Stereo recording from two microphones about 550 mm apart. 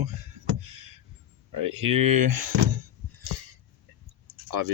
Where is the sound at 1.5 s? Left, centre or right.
Right.